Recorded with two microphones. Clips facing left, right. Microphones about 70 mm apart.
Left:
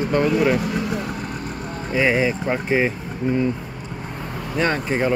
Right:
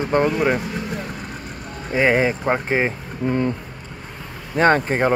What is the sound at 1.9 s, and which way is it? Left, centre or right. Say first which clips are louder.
Speech: right 2 dB; right.